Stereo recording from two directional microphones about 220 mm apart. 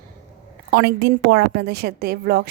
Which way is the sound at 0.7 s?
45° right (ahead or behind).